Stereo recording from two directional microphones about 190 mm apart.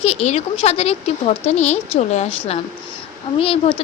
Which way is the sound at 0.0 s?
35° left (ahead or behind).